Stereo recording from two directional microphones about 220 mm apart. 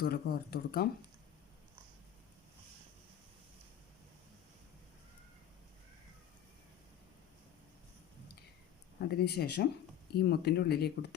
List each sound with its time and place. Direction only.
0.0 s speech: 45° left (ahead or behind)
9.0 s speech: 45° left (ahead or behind)